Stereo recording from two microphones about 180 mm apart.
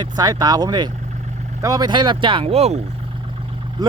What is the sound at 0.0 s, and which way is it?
Speech, 20° right (ahead or behind).